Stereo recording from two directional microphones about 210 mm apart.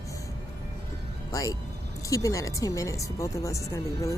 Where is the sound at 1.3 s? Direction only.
15° left (ahead or behind).